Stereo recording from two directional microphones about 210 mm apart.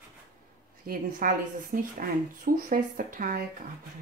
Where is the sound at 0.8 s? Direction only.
45° right (ahead or behind).